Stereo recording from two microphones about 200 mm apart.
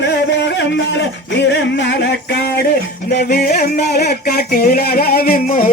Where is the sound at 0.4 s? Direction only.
60° left (ahead or behind).